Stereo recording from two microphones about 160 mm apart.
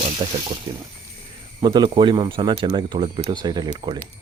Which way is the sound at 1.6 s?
25° right (ahead or behind).